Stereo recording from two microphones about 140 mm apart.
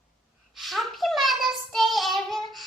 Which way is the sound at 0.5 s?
Centre (ahead or behind).